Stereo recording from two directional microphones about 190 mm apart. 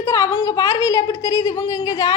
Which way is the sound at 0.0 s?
15° left (ahead or behind).